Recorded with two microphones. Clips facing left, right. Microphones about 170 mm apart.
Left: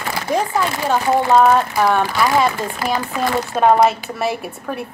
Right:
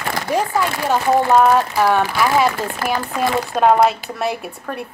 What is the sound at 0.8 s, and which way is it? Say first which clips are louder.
A woman's voice: right 1 dB; centre (ahead or behind).